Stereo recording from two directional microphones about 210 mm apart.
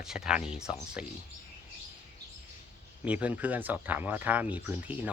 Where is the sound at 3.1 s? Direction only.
5° right (ahead or behind).